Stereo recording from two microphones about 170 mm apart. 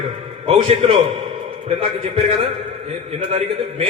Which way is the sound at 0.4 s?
35° right (ahead or behind).